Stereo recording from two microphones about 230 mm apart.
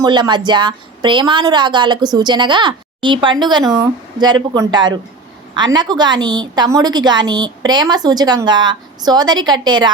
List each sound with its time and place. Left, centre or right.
0.0 s a woman's voice: centre